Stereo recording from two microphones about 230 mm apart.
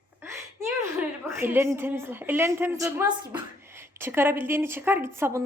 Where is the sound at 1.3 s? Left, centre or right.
Centre.